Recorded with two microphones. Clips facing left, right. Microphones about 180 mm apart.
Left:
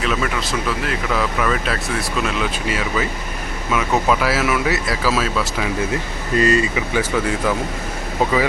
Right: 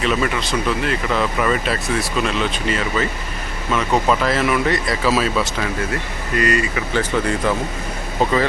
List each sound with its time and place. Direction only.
0.0 s speech: centre (ahead or behind)
5.9 s speech: 25° left (ahead or behind)
6.9 s speech: 5° left (ahead or behind)